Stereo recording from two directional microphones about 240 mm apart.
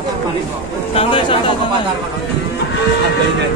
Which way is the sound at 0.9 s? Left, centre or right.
Left.